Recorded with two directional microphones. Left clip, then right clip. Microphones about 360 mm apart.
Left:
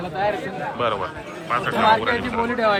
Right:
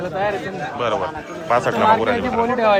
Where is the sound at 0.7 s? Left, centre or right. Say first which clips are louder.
Right 3 dB; centre.